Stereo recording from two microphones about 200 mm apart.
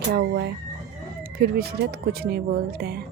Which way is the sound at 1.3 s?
50° right (ahead or behind).